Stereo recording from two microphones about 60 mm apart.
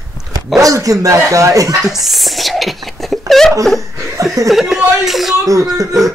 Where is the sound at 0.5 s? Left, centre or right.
Right.